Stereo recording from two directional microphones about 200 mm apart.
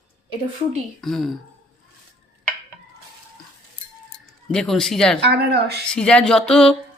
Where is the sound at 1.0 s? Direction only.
Centre (ahead or behind).